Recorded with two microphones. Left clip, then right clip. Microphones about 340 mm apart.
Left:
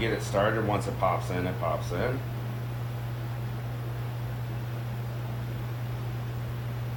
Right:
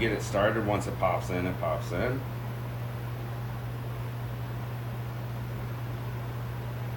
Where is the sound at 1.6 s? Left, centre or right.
Centre.